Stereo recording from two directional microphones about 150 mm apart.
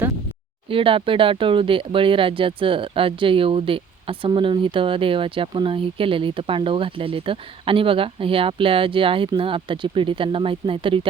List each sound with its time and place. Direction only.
0.7 s speech: 35° right (ahead or behind)